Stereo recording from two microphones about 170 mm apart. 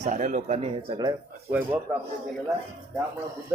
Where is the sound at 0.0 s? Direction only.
45° right (ahead or behind); by 1.1 s 30° right (ahead or behind).